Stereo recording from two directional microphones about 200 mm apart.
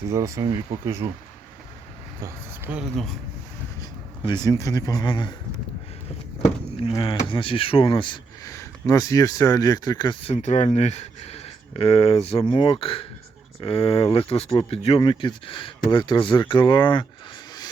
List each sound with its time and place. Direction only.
0.1 s speech: 15° right (ahead or behind)
2.2 s speech: 5° right (ahead or behind)
3.8 s speech: 20° left (ahead or behind)
6.9 s speech: 25° left (ahead or behind)
10.3 s speech: 35° left (ahead or behind)